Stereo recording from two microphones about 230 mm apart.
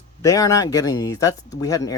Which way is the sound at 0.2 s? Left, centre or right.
Centre.